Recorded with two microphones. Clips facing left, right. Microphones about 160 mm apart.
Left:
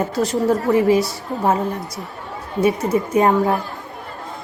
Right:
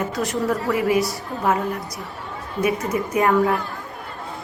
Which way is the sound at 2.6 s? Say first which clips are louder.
Left 4 dB; 30° left (ahead or behind).